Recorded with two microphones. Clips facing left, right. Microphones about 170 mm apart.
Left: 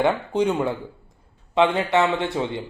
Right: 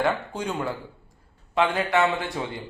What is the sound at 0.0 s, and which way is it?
Speech, 20° left (ahead or behind).